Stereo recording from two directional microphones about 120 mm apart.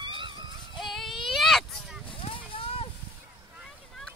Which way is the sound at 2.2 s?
50° left (ahead or behind).